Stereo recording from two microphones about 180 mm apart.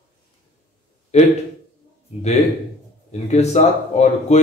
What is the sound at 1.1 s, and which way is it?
Speech, 40° left (ahead or behind).